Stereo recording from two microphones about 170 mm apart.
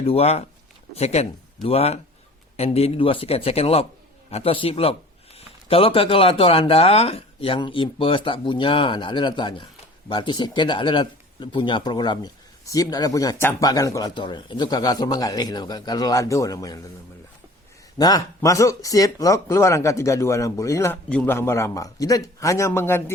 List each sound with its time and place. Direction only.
0.0 s a man's voice: 35° left (ahead or behind); by 16.8 s 20° left (ahead or behind)
17.9 s a man's voice: 25° left (ahead or behind)